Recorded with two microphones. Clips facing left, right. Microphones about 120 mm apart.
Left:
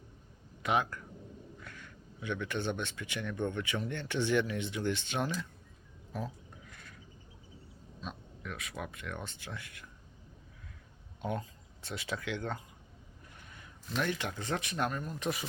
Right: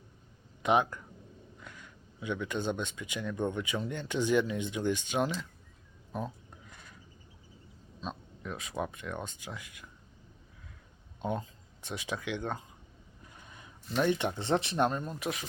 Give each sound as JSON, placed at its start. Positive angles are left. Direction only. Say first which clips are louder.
{"t": 0.6, "sound": "speech", "louder": "right 4 dB", "side_deg": -20}
{"t": 6.1, "sound": "a sound", "louder": "right 2 dB", "side_deg": -20}
{"t": 8.0, "sound": "speech", "louder": "right 4 dB", "side_deg": -30}
{"t": 11.2, "sound": "speech", "louder": "right 2 dB", "side_deg": -20}
{"t": 13.4, "sound": "a sound", "louder": "right 2 dB", "side_deg": -20}
{"t": 14.0, "sound": "speech", "louder": "right 6 dB", "side_deg": -20}